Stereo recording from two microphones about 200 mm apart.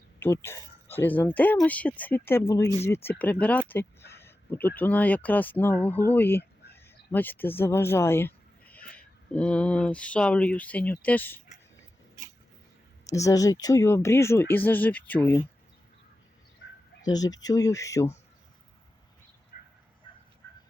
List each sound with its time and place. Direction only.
0.2 s speech: 10° left (ahead or behind)
3.7 s a sound: 10° left (ahead or behind)
4.8 s speech: 10° left (ahead or behind)
13.1 s speech: 15° left (ahead or behind)
17.0 s speech: 20° left (ahead or behind)
20.1 s fowl: 25° left (ahead or behind)